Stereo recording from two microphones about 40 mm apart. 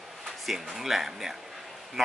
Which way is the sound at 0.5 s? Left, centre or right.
Centre.